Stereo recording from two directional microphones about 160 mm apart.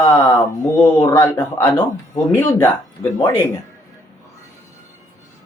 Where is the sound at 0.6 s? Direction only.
15° left (ahead or behind).